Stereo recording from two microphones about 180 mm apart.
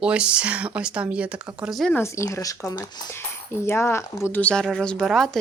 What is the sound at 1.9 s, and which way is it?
Speech, 15° left (ahead or behind).